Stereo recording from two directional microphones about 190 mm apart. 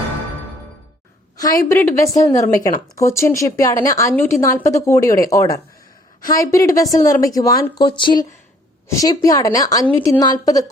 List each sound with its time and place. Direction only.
1.4 s a woman's voice: 20° left (ahead or behind)